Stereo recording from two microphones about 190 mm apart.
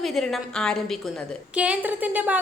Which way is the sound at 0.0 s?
Centre (ahead or behind).